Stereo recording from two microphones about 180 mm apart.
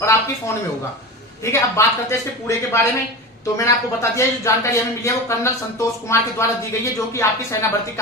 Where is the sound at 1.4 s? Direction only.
15° left (ahead or behind).